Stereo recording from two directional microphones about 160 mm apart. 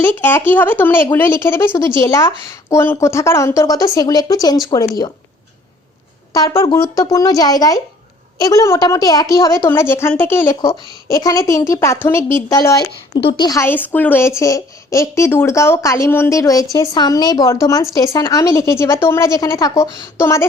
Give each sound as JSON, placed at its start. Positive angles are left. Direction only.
{"t": 0.0, "sound": "a woman's voice", "side_deg": 15}
{"t": 6.3, "sound": "a woman's voice", "side_deg": 30}
{"t": 13.7, "sound": "a woman's voice", "side_deg": 10}